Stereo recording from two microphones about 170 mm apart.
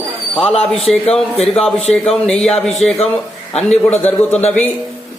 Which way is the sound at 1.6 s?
5° left (ahead or behind).